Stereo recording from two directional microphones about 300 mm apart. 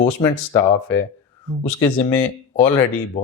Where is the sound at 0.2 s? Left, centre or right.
Centre.